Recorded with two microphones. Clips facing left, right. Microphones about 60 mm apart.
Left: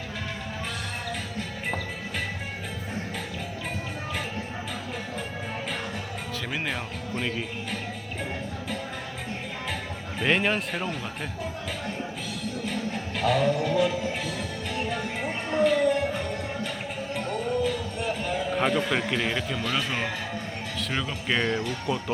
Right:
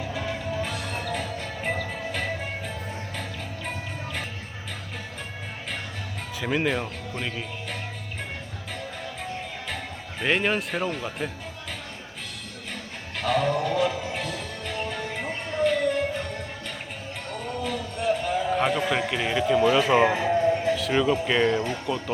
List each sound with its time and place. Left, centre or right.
6.4 s speech: centre
10.2 s speech: centre
13.1 s music: centre
17.3 s a sound: centre
18.5 s speech: centre
19.9 s music: right
20.7 s speech: centre